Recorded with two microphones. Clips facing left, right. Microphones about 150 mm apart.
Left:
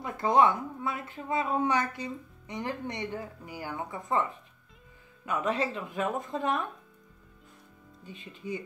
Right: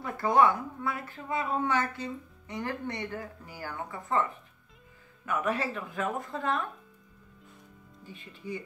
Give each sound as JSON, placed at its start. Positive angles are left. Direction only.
{"t": 0.0, "sound": "a woman's voice", "side_deg": 20}
{"t": 8.1, "sound": "speech", "side_deg": 20}